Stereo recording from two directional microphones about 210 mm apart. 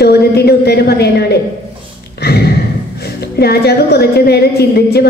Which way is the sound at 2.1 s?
50° left (ahead or behind).